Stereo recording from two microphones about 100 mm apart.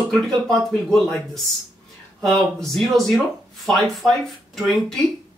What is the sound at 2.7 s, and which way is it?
Speech, centre (ahead or behind).